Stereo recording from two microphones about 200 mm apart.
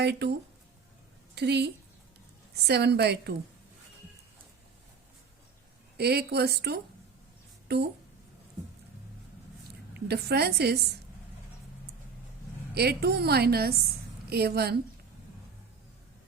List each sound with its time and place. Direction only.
0.0 s a woman's voice: 55° right (ahead or behind)
1.4 s a woman's voice: 55° right (ahead or behind)
6.0 s a woman's voice: 55° right (ahead or behind)
9.9 s a woman's voice: 55° right (ahead or behind)
12.7 s a woman's voice: 50° right (ahead or behind)